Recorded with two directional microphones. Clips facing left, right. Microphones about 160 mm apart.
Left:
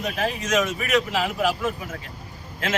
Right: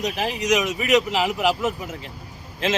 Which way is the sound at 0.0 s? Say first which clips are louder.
Right 1 dB; 15° right (ahead or behind).